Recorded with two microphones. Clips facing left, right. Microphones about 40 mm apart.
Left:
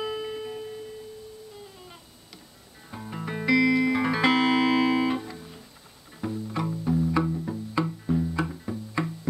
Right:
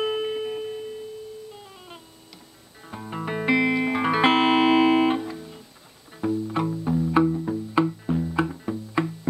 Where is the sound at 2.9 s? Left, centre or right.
Centre.